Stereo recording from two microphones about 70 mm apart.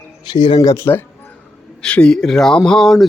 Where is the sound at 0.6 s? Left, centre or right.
Left.